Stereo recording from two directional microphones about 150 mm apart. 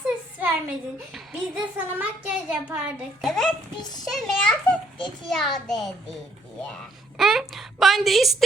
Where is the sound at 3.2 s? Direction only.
5° left (ahead or behind).